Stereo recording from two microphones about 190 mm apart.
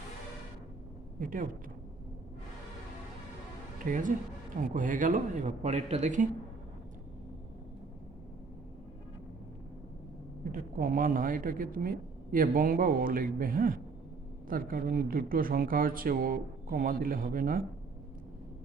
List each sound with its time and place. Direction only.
1.2 s speech: 45° right (ahead or behind)
3.8 s speech: 45° right (ahead or behind)
10.5 s speech: 50° right (ahead or behind)